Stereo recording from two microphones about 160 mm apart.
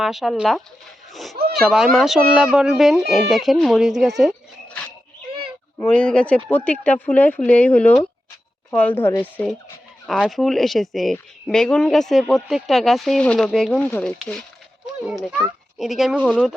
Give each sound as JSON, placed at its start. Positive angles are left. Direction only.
{"t": 0.0, "sound": "a woman's voice", "side_deg": 0}
{"t": 5.3, "sound": "a sound", "side_deg": -40}
{"t": 5.8, "sound": "speech", "side_deg": 5}
{"t": 10.1, "sound": "a woman's voice", "side_deg": 0}